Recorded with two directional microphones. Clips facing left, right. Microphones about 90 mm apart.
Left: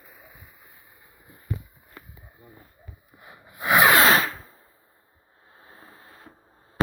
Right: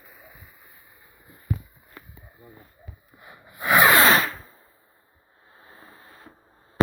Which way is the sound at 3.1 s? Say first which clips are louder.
Even; 10° left (ahead or behind).